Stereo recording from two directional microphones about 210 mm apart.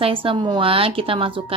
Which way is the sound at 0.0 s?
25° right (ahead or behind).